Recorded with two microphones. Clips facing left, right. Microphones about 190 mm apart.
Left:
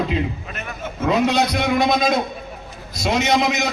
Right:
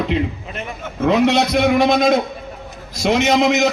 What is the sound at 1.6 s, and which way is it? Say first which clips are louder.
Speech: right 6 dB; 50° right (ahead or behind).